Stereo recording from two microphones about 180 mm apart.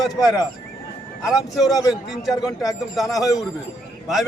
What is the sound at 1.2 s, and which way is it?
Speech, centre (ahead or behind).